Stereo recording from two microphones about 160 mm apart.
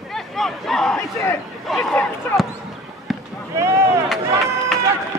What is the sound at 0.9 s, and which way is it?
Crowd, 15° left (ahead or behind).